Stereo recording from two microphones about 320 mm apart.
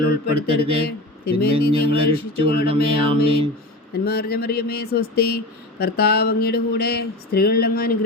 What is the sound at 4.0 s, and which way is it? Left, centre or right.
Speech, left.